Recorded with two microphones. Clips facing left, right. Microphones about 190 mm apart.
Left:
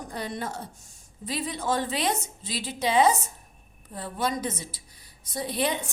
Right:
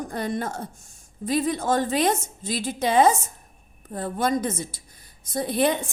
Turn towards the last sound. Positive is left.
turn(degrees=-50)  # may be behind; listen again after turning